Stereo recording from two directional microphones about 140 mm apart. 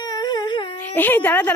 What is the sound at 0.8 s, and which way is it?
Speech, 15° left (ahead or behind).